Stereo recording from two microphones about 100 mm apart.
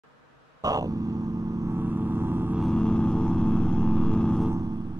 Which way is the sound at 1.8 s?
20° right (ahead or behind).